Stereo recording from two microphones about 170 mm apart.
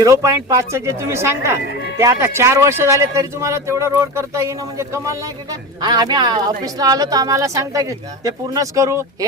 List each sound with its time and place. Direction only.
0.0 s a woman's voice: 20° right (ahead or behind)